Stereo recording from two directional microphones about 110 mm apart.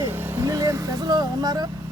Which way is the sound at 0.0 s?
20° right (ahead or behind).